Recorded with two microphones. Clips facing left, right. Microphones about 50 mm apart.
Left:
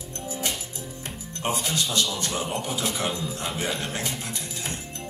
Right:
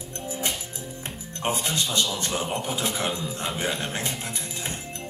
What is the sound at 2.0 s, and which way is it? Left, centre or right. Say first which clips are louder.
Speech: right 1 dB; centre.